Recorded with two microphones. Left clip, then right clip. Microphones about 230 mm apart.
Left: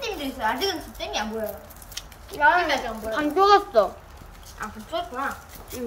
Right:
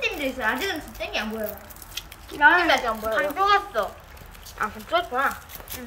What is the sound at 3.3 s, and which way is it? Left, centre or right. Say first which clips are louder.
Speech: left 7 dB; left.